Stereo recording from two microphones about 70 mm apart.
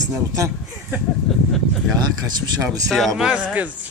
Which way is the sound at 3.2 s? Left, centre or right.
Centre.